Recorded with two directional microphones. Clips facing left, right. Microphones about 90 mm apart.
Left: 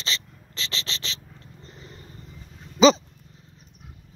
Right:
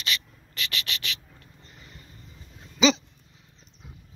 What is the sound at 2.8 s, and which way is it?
Dog, 40° left (ahead or behind).